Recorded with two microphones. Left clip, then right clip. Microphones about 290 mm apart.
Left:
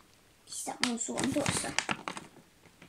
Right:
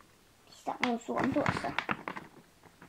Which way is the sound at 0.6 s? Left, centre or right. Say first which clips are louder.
Right 1 dB; left.